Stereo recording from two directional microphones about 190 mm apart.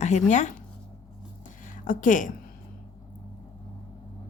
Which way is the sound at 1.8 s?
45° left (ahead or behind).